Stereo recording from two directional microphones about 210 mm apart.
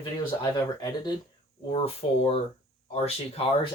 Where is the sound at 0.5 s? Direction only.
20° left (ahead or behind).